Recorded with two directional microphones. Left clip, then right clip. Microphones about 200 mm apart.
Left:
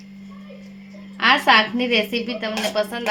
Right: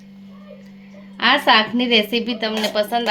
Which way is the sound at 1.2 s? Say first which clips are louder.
Even; 35° right (ahead or behind).